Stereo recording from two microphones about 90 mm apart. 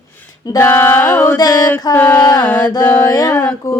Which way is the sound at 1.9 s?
25° left (ahead or behind).